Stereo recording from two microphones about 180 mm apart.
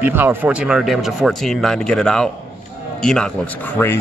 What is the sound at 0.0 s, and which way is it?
A man's voice, 10° right (ahead or behind).